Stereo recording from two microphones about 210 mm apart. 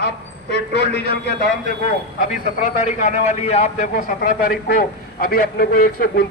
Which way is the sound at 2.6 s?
35° left (ahead or behind).